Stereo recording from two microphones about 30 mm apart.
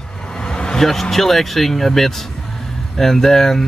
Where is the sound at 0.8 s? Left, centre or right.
Centre.